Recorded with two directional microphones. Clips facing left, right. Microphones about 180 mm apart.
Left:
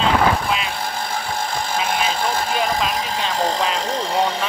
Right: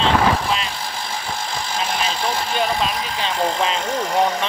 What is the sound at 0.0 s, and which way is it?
Vehicle, 5° left (ahead or behind).